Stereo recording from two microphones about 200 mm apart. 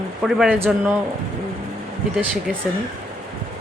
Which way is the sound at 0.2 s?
Centre (ahead or behind).